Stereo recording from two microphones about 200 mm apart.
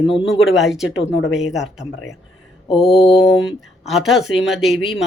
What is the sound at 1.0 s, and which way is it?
Speech, 70° left (ahead or behind).